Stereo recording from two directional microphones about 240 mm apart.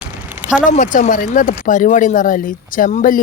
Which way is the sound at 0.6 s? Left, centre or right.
Left.